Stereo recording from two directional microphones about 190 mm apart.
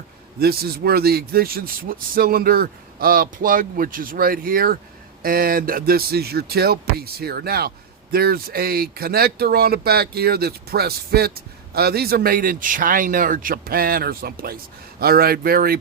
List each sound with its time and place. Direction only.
0.3 s speech: 55° right (ahead or behind)